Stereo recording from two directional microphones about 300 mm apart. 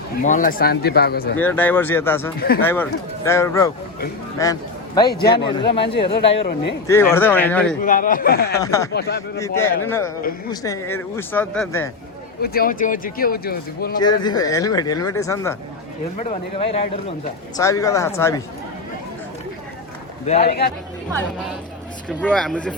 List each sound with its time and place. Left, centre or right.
0.2 s speech: left
1.4 s speech: centre
5.8 s speech: left
6.8 s speech: centre
7.9 s speech: left
8.6 s speech: centre
8.9 s speech: left
9.4 s speech: centre
12.4 s speech: left
13.9 s speech: centre
16.1 s speech: left
20.2 s speech: left
22.2 s speech: centre